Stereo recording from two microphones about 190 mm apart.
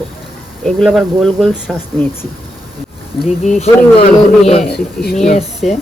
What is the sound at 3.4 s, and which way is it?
Speech, 35° left (ahead or behind).